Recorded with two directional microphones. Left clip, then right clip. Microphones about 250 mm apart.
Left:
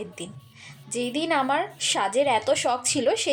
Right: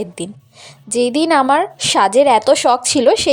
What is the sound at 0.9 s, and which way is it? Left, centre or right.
A woman's voice, right.